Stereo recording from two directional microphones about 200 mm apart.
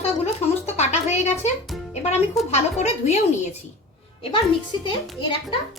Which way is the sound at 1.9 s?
35° left (ahead or behind).